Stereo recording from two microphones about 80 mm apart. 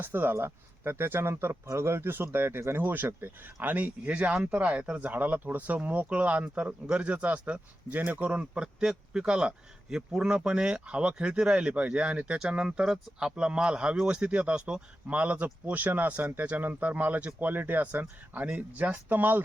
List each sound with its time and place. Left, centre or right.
0.0 s speech: right